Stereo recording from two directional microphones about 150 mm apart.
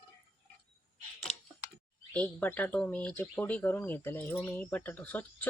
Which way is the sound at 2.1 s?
10° left (ahead or behind).